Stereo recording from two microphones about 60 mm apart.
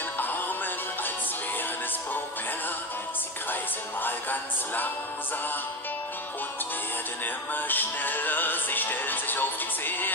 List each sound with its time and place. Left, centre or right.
4.0 s music: left
7.5 s music: left